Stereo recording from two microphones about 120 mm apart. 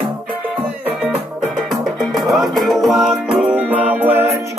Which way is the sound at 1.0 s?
Centre (ahead or behind).